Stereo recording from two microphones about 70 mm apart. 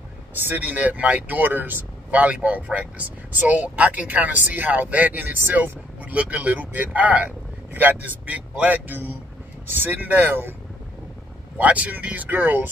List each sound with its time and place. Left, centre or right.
0.3 s speech: right
11.5 s speech: right